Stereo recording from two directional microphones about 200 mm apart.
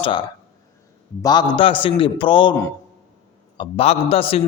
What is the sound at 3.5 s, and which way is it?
Speech, 30° left (ahead or behind).